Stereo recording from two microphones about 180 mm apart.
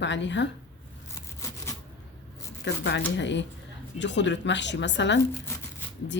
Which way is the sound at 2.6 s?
80° left.